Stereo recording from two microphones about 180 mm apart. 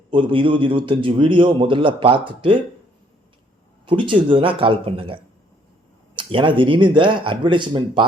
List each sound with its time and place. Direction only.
0.1 s a man's voice: 25° right (ahead or behind)
3.8 s a man's voice: 25° right (ahead or behind)